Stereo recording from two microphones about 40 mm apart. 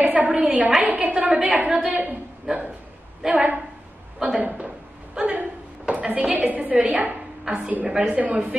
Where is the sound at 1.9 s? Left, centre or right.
Right.